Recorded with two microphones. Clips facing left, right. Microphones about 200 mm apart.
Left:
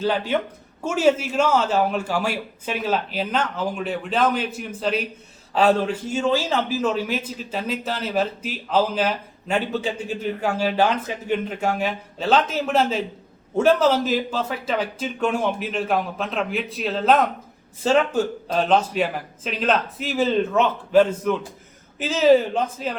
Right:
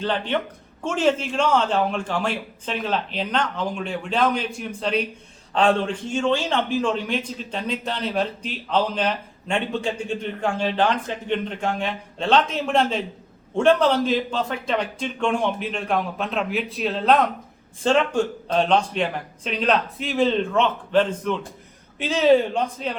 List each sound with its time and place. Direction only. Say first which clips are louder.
0.0 s a man's voice: left 2 dB; 5° left (ahead or behind)